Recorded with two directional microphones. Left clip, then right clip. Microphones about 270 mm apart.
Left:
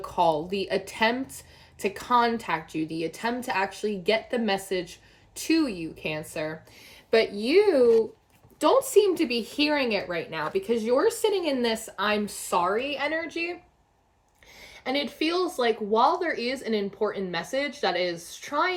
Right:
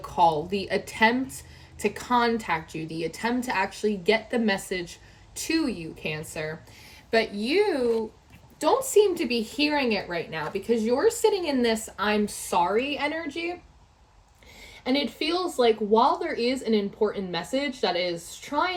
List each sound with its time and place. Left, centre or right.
0.0 s speech: centre
14.6 s speech: centre